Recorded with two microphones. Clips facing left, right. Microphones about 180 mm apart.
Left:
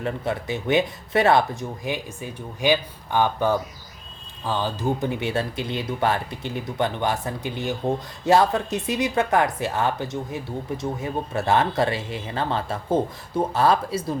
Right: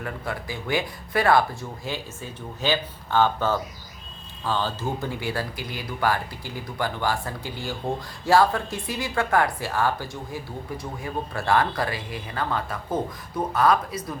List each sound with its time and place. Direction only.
0.0 s speech: 25° left (ahead or behind)